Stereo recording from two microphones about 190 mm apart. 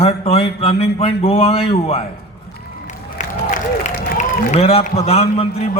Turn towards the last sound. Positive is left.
turn(degrees=35)  # may be behind; listen again after turning